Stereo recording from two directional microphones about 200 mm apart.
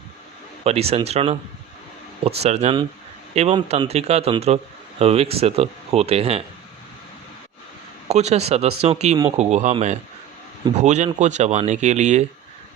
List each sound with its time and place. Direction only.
0.6 s a man's voice: 30° right (ahead or behind)
8.0 s a man's voice: 35° right (ahead or behind)